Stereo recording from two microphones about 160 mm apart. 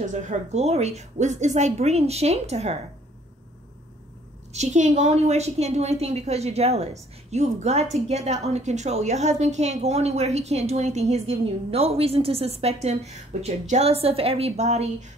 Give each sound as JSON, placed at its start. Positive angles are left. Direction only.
{"t": 0.0, "sound": "a woman's voice", "side_deg": -50}
{"t": 4.6, "sound": "a woman's voice", "side_deg": -45}